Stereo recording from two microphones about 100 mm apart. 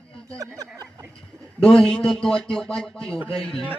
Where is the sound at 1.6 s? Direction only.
10° left (ahead or behind).